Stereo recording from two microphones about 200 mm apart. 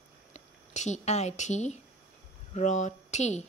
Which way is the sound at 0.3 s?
35° left (ahead or behind).